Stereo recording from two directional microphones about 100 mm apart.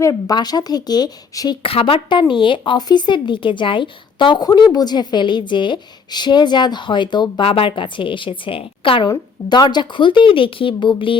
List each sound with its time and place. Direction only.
0.0 s speech: 35° left (ahead or behind)
1.6 s a woman's voice: 65° left (ahead or behind)
9.5 s speech: 45° left (ahead or behind)